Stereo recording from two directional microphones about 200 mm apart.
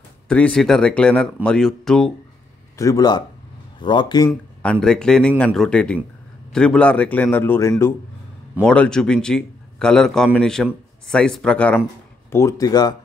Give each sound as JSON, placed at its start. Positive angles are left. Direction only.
{"t": 0.3, "sound": "a man's voice", "side_deg": 5}
{"t": 2.8, "sound": "speech", "side_deg": 20}
{"t": 4.3, "sound": "a man's voice", "side_deg": 5}